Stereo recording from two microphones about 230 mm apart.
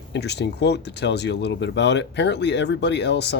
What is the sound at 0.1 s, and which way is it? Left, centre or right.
Speech, left.